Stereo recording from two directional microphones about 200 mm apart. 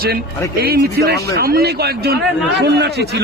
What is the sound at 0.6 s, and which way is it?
A man's voice, 55° right (ahead or behind).